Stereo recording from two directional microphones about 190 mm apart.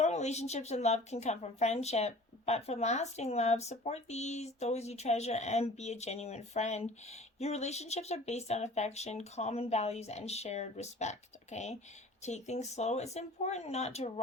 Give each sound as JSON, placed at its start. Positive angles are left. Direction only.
{"t": 0.0, "sound": "speech", "side_deg": 35}